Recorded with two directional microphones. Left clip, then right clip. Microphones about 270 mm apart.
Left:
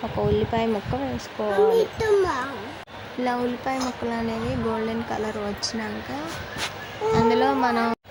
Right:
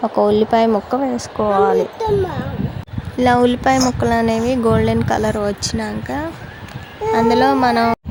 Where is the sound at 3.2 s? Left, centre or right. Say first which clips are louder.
Right 12 dB; right.